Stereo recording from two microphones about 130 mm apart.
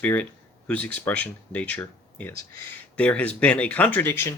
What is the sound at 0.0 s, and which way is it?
Speech, 10° left (ahead or behind).